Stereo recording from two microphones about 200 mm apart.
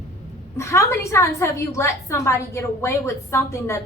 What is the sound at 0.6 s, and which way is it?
A woman's voice, 15° left (ahead or behind).